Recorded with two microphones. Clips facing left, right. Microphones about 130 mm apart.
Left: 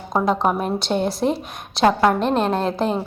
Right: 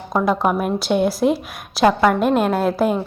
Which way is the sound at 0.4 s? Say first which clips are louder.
Right 2 dB; 5° right (ahead or behind).